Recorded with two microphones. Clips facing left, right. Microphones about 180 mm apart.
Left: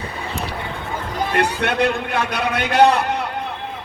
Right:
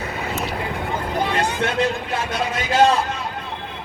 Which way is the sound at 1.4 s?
65° left (ahead or behind).